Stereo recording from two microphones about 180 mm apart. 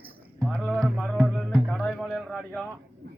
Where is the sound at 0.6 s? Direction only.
Centre (ahead or behind).